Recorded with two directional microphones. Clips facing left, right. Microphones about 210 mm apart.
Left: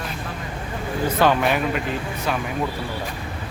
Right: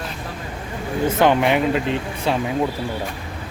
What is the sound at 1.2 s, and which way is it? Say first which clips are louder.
Speech: right 3 dB; 20° right (ahead or behind).